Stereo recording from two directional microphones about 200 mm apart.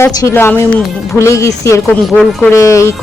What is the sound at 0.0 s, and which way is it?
Speech, 15° left (ahead or behind).